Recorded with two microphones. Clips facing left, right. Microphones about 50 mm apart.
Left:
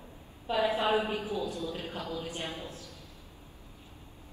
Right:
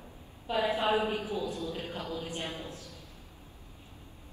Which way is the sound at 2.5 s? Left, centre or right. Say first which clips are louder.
Even; right.